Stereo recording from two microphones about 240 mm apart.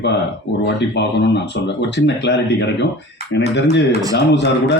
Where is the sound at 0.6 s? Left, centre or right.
Left.